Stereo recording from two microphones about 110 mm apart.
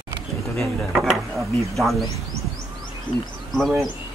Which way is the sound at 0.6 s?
Centre (ahead or behind).